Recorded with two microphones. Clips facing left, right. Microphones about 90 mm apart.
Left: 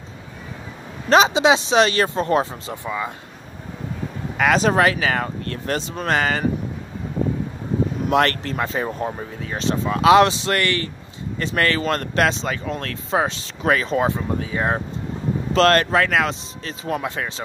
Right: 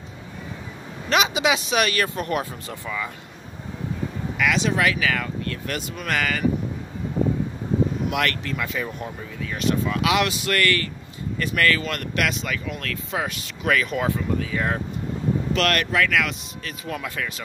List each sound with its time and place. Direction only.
1.0 s speech: 35° left (ahead or behind)
4.4 s speech: 40° left (ahead or behind)
8.1 s speech: 35° left (ahead or behind)